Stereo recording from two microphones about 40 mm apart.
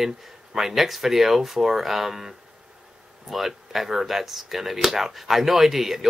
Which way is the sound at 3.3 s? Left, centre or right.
Centre.